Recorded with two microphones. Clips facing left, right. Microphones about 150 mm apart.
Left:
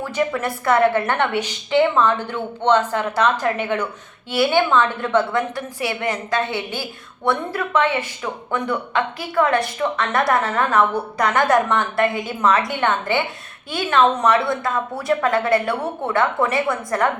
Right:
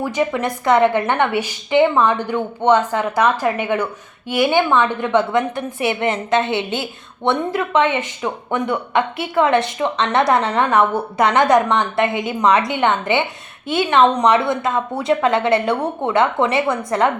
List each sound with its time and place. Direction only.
0.0 s a woman's voice: 15° right (ahead or behind)